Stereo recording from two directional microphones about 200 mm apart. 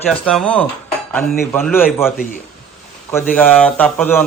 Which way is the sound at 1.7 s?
10° left (ahead or behind).